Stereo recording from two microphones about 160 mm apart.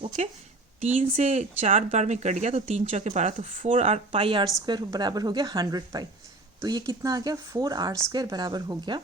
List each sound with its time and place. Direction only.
0.2 s a woman's voice: 45° right (ahead or behind); by 9.0 s 25° right (ahead or behind)